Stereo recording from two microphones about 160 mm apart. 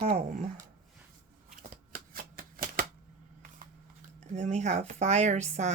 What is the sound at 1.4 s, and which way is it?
Shuffling cards, 60° right (ahead or behind).